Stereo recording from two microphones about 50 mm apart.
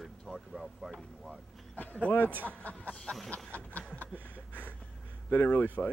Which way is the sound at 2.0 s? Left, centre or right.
Left.